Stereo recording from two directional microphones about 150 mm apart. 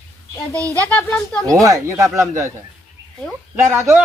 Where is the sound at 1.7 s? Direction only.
20° right (ahead or behind).